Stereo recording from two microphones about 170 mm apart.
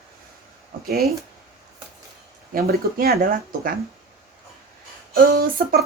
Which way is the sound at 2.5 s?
60° right (ahead or behind).